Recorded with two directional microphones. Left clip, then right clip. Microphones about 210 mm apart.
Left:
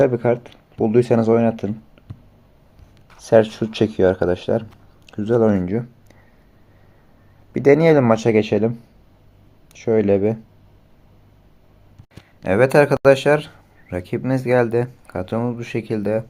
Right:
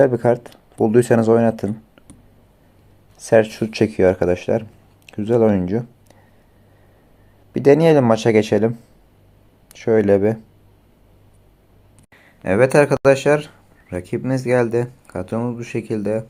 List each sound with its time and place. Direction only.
0.0 s speech: 15° right (ahead or behind)
3.2 s speech: 10° right (ahead or behind)
7.5 s speech: 10° right (ahead or behind)
12.2 s speech: centre (ahead or behind)